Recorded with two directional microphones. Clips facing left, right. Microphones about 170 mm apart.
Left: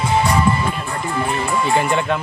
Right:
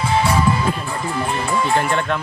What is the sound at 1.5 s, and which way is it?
Speech, centre (ahead or behind).